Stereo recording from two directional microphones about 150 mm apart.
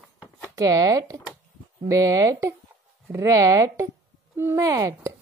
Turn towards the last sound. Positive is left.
turn(degrees=-20)  # may be behind; listen again after turning